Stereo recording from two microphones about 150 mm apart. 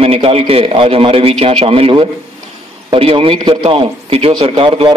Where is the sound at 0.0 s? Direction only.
40° right (ahead or behind).